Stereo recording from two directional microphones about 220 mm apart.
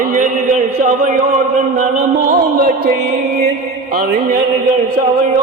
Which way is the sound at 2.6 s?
45° right (ahead or behind).